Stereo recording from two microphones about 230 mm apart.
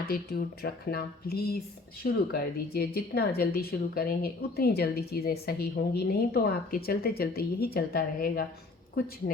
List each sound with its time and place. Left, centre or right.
0.0 s speech: left